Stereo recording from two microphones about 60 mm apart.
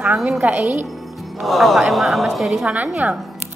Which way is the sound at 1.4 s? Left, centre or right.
Centre.